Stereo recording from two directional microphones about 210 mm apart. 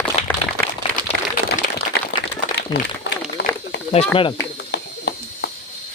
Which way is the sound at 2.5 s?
55° left (ahead or behind).